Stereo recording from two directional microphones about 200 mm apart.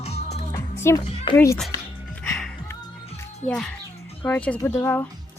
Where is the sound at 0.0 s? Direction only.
30° left (ahead or behind).